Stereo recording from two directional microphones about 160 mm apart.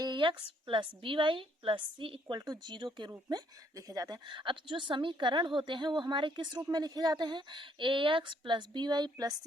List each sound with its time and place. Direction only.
0.0 s speech: 30° right (ahead or behind)